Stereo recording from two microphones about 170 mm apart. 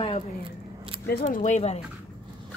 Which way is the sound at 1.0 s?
60° left (ahead or behind).